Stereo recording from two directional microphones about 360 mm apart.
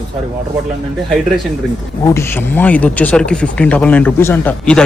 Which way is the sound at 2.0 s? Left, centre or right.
Centre.